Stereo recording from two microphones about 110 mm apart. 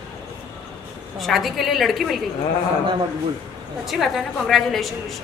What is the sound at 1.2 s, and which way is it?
Speech, centre (ahead or behind).